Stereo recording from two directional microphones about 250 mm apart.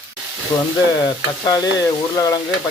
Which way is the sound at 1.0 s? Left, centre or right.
Centre.